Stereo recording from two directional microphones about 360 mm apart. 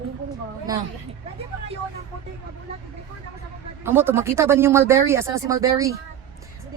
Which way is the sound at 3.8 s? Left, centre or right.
Centre.